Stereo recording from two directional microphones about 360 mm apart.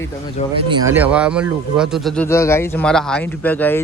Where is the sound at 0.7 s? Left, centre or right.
Centre.